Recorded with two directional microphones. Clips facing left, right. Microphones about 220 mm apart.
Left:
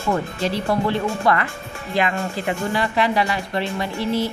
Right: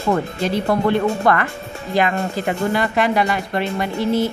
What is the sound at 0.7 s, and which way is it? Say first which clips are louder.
A woman's voice: right 5 dB; 50° right (ahead or behind).